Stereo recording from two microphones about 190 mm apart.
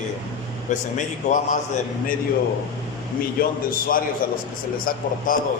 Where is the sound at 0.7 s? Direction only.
40° left (ahead or behind).